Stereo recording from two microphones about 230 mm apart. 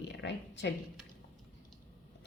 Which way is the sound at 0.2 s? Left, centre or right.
Left.